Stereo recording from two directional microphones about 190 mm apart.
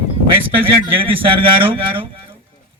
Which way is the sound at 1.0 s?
30° right (ahead or behind).